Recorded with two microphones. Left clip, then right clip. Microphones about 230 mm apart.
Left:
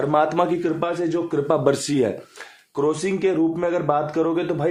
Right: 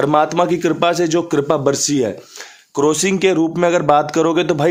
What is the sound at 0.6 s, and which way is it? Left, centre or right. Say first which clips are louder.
Speech: right 7 dB; right.